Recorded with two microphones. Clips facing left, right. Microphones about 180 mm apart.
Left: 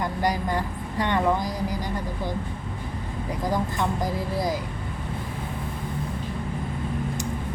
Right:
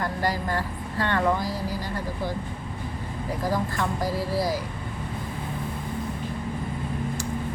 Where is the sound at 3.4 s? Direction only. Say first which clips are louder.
Left 1 dB; 20° left (ahead or behind).